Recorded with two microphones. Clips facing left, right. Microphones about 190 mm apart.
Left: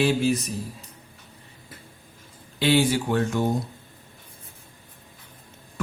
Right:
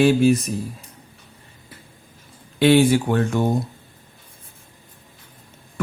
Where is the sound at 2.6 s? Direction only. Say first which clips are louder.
Right 6 dB; 55° right (ahead or behind).